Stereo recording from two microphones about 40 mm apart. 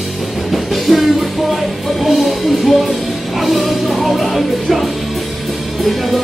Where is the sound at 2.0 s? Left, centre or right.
Centre.